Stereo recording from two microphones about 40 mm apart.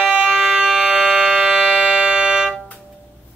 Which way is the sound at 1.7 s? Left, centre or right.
Right.